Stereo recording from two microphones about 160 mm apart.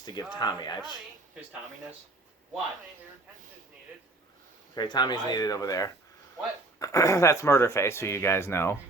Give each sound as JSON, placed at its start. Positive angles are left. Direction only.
{"t": 0.0, "sound": "speech", "side_deg": 25}
{"t": 4.7, "sound": "speech", "side_deg": 25}